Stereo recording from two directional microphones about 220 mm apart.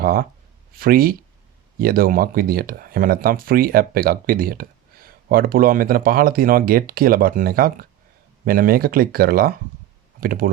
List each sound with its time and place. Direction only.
0.0 s speech: 40° right (ahead or behind)